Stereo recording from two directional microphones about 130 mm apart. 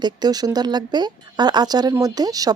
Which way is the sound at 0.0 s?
30° right (ahead or behind).